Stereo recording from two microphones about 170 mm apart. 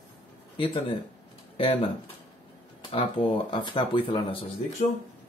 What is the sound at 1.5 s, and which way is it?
Speech, 30° left (ahead or behind).